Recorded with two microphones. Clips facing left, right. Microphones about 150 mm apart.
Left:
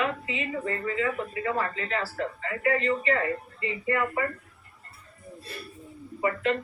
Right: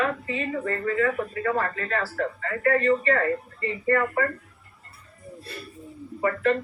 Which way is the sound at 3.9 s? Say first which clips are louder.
Right 4 dB; 45° right (ahead or behind).